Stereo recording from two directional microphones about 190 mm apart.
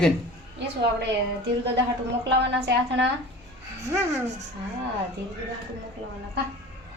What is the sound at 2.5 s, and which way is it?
Speech, 65° right (ahead or behind).